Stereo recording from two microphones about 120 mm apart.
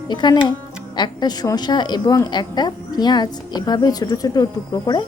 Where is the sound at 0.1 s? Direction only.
35° left (ahead or behind).